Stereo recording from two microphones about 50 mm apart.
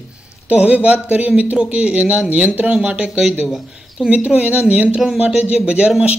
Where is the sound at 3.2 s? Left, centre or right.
Centre.